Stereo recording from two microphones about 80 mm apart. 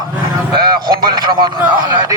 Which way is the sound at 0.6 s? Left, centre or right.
Right.